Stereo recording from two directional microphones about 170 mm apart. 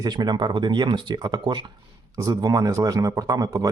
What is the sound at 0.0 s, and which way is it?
A man's voice, 25° right (ahead or behind).